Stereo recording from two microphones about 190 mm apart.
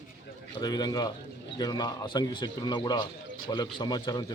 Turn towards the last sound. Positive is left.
turn(degrees=20)  # may be behind; listen again after turning